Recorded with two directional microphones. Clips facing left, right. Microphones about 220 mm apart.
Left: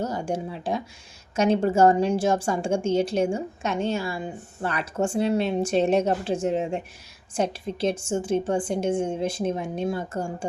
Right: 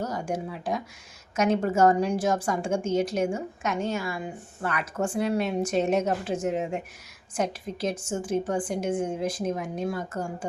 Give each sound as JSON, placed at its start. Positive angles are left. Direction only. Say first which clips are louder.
{"t": 0.0, "sound": "a woman's voice", "louder": "left 2 dB", "side_deg": 30}